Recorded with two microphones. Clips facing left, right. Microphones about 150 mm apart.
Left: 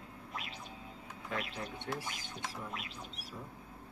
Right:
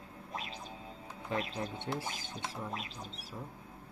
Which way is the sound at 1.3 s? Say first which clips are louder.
Right 4 dB; 30° right (ahead or behind).